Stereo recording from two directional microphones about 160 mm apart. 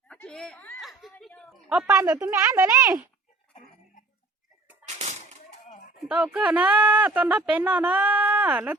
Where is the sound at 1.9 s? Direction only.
20° right (ahead or behind).